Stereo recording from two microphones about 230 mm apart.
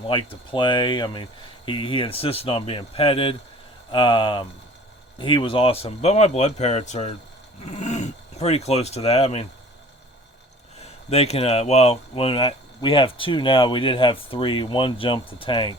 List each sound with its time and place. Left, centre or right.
0.0 s speech: left
11.1 s speech: left